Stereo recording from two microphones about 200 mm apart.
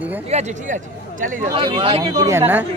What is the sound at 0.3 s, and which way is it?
Speech, 35° right (ahead or behind).